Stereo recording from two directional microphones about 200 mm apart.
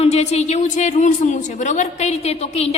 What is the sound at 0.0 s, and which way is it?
A woman's voice, 30° left (ahead or behind).